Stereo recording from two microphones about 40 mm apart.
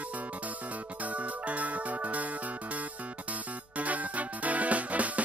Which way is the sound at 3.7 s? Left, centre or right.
Right.